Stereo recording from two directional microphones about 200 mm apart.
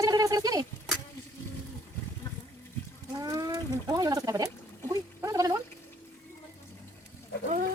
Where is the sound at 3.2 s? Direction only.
15° right (ahead or behind).